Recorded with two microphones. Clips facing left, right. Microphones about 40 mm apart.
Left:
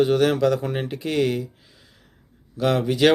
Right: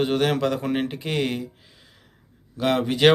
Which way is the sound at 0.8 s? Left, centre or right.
Right.